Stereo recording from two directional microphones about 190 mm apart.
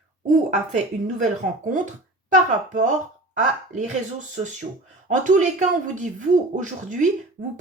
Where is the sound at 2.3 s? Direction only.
40° right (ahead or behind).